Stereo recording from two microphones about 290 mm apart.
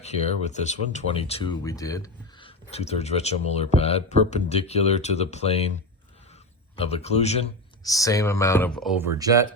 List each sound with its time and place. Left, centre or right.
0.0 s speech: left
6.7 s speech: left
7.9 s speech: centre